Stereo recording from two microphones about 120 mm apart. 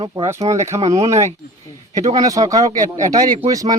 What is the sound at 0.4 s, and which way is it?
Speech, 60° right (ahead or behind).